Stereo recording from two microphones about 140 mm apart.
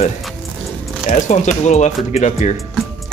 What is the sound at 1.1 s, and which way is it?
Speech, 55° left (ahead or behind).